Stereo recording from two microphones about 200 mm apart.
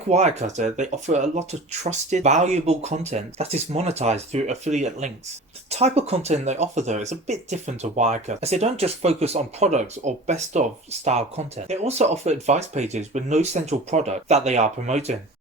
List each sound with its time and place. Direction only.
0.1 s speech: 35° right (ahead or behind)